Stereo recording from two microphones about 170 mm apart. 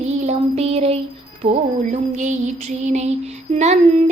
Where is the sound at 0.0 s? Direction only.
40° right (ahead or behind).